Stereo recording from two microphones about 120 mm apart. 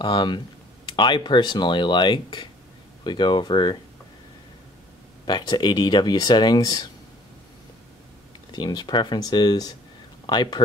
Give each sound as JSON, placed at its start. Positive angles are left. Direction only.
{"t": 0.0, "sound": "speech", "side_deg": 40}
{"t": 5.2, "sound": "speech", "side_deg": 35}
{"t": 8.5, "sound": "speech", "side_deg": 35}